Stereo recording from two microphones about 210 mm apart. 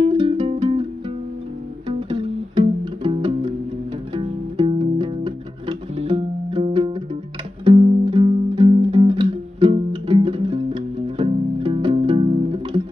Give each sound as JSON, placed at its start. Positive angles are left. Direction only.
{"t": 0.0, "sound": "music", "side_deg": -25}
{"t": 1.9, "sound": "music", "side_deg": -25}